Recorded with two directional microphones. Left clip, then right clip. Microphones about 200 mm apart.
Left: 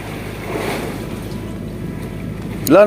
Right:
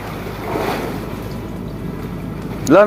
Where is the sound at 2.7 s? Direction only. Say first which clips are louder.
Left 1 dB; 5° left (ahead or behind).